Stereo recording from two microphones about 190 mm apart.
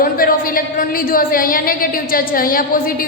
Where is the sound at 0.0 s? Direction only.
50° left (ahead or behind).